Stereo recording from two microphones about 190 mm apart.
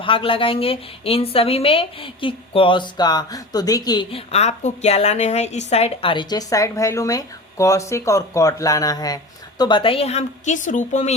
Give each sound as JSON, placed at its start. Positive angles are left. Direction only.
{"t": 0.0, "sound": "a woman's voice", "side_deg": 25}